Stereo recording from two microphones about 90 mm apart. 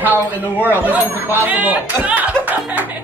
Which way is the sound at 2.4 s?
15° right (ahead or behind).